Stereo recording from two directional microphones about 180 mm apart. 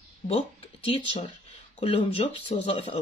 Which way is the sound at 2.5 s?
35° left (ahead or behind).